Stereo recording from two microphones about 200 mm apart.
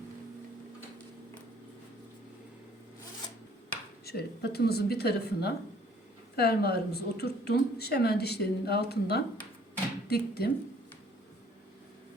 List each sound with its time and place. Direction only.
4.0 s a woman's voice: 50° left (ahead or behind)